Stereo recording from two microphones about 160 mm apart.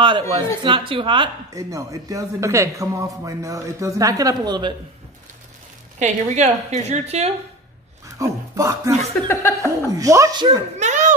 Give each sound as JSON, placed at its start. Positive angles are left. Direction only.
{"t": 0.0, "sound": "speech", "side_deg": -30}
{"t": 5.9, "sound": "a woman's voice", "side_deg": -45}
{"t": 8.2, "sound": "speech", "side_deg": -20}
{"t": 9.3, "sound": "speech", "side_deg": 20}
{"t": 9.9, "sound": "speech", "side_deg": -20}
{"t": 10.8, "sound": "a sound", "side_deg": -50}